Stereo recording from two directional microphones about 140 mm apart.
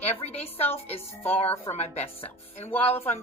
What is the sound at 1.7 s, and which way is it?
Speech, 50° left (ahead or behind).